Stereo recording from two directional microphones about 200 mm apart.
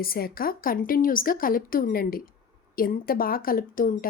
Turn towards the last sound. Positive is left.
turn(degrees=45)  # may be behind; listen again after turning